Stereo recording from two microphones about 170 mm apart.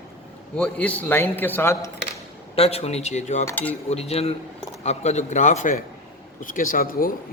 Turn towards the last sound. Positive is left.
turn(degrees=55)  # may be behind; listen again after turning